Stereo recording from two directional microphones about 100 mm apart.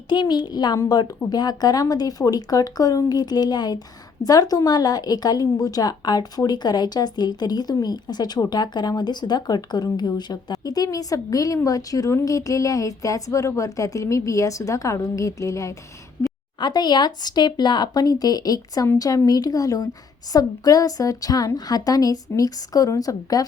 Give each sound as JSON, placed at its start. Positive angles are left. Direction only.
{"t": 0.1, "sound": "a woman's voice", "side_deg": 45}
{"t": 16.6, "sound": "a woman's voice", "side_deg": 45}